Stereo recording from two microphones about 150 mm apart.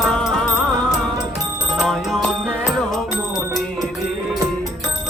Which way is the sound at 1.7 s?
Centre (ahead or behind).